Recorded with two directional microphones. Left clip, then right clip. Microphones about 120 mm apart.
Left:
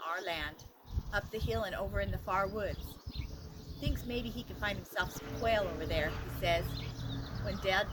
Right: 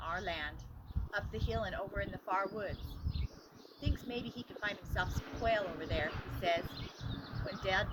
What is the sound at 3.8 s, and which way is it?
Speech, 45° left (ahead or behind).